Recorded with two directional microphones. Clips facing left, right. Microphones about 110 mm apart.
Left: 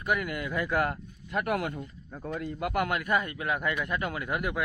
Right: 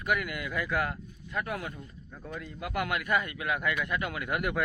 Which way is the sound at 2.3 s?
50° left (ahead or behind).